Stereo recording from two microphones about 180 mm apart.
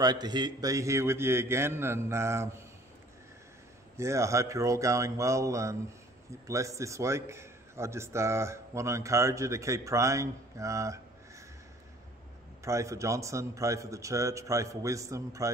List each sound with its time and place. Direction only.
0.0 s a man's voice: 25° right (ahead or behind)
3.9 s a man's voice: 15° right (ahead or behind)
12.6 s a man's voice: 15° right (ahead or behind)